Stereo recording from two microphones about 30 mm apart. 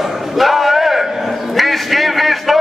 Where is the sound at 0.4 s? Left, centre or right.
Centre.